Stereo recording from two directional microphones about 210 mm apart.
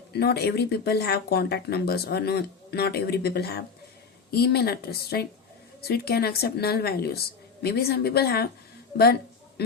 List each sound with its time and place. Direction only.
0.1 s speech: 50° left (ahead or behind)
9.6 s speech: 50° left (ahead or behind)